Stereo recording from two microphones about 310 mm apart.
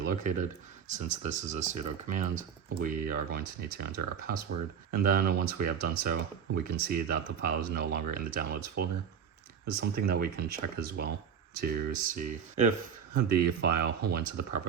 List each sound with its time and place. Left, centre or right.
0.0 s speech: right